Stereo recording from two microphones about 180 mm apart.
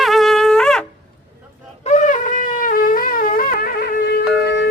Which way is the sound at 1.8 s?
40° left (ahead or behind).